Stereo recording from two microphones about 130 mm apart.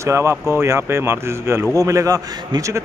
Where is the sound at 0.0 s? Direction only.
20° right (ahead or behind).